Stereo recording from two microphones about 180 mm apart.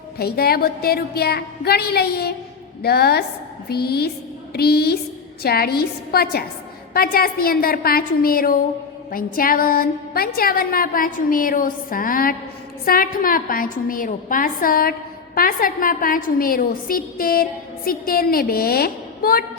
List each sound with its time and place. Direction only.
0.2 s a woman's voice: 60° left (ahead or behind)